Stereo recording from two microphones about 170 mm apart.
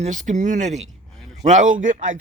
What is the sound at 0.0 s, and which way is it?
Speech, 45° right (ahead or behind).